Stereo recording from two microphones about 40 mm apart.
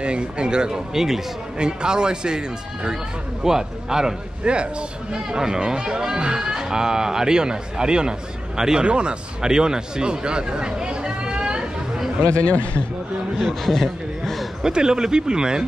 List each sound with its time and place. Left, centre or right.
0.0 s speech: right
1.6 s speech: centre
4.5 s speech: right
12.3 s a man's voice: left
13.4 s a man's voice: centre
14.6 s speech: centre